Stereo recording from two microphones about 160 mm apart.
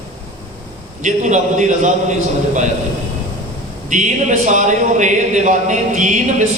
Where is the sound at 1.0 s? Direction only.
50° right (ahead or behind).